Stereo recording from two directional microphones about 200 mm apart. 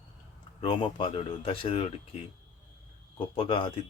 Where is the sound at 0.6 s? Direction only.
25° left (ahead or behind).